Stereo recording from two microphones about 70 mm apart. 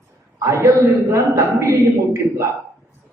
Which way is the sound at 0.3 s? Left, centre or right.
Right.